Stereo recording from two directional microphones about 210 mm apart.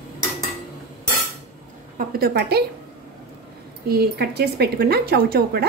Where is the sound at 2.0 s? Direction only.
45° right (ahead or behind).